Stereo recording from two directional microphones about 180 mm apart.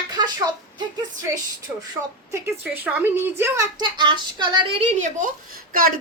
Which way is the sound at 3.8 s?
25° right (ahead or behind).